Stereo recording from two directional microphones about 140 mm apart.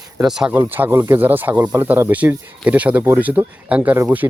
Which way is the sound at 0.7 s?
15° right (ahead or behind).